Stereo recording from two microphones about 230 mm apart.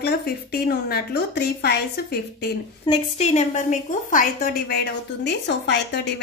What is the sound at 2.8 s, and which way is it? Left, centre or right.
A woman's voice, left.